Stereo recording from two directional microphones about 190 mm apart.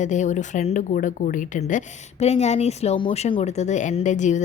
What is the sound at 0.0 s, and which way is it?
Speech, 40° left (ahead or behind).